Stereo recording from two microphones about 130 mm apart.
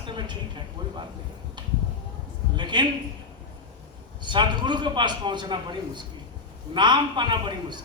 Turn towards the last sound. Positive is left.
turn(degrees=-35)  # may be behind; listen again after turning